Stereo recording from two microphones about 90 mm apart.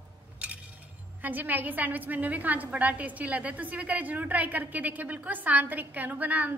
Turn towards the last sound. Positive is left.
turn(degrees=-20)  # may be behind; listen again after turning